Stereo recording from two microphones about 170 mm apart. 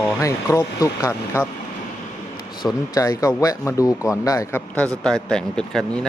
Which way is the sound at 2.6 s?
20° left (ahead or behind).